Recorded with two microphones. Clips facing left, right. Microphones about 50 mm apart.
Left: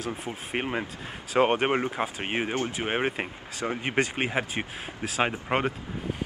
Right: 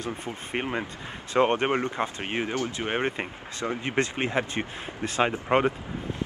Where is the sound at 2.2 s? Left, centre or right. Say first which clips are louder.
Even; centre.